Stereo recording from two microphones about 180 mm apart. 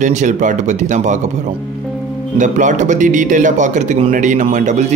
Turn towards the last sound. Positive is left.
turn(degrees=-40)  # may be behind; listen again after turning